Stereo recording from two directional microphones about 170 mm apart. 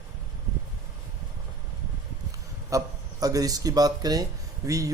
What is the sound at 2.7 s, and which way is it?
Speech, 20° right (ahead or behind).